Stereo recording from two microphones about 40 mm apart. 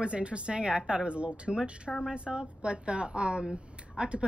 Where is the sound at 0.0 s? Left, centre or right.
Right.